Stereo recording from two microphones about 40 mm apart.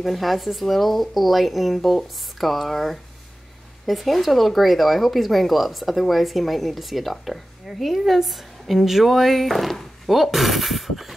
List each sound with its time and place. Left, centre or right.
0.0 s speech: centre